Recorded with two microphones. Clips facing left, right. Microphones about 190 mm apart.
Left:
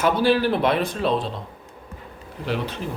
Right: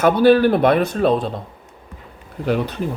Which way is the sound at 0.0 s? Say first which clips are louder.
Right 6 dB; 50° right (ahead or behind).